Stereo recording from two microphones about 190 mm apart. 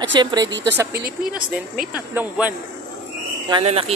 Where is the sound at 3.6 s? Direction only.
30° right (ahead or behind).